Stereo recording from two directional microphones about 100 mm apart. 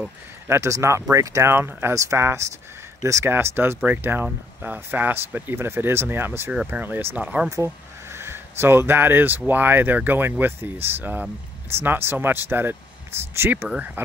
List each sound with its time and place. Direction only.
0.5 s speech: 30° right (ahead or behind); by 7.4 s 15° right (ahead or behind)
7.4 s speech: 30° right (ahead or behind)
13.7 s speech: 10° right (ahead or behind)